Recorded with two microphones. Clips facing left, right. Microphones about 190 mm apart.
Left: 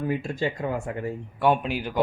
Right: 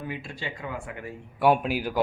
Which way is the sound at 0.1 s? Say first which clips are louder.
Left 9 dB; 45° left (ahead or behind).